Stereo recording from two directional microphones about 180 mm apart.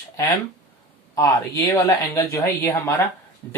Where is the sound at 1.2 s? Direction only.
20° left (ahead or behind).